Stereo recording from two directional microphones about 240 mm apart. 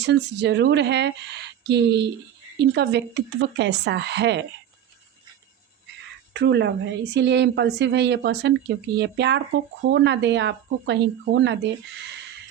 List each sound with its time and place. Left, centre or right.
0.0 s speech: right
6.3 s speech: right